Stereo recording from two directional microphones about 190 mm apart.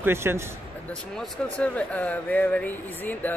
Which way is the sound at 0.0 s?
10° right (ahead or behind).